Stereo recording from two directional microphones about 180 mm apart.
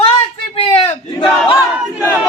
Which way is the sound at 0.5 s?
30° left (ahead or behind).